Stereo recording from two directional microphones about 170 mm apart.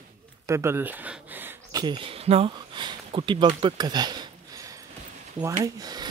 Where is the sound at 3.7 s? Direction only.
25° right (ahead or behind).